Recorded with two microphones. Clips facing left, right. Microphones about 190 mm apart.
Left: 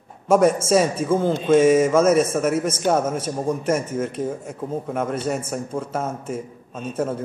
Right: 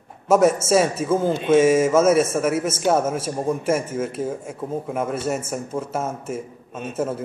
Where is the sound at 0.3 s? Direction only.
5° right (ahead or behind).